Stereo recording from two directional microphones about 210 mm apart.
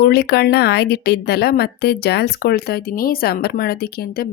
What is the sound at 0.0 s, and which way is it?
Speech, 50° left (ahead or behind).